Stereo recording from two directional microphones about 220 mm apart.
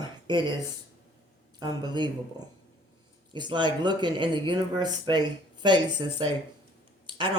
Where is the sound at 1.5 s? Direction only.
20° right (ahead or behind).